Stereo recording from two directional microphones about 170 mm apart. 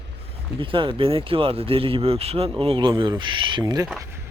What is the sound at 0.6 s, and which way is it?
Speech, 30° right (ahead or behind).